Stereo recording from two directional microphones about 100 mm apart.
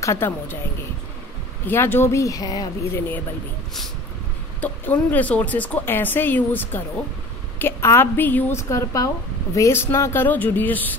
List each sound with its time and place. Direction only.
0.0 s a woman's voice: 25° left (ahead or behind)
1.7 s speech: 20° left (ahead or behind); by 2.7 s 40° left (ahead or behind)
4.6 s a woman's voice: 15° left (ahead or behind)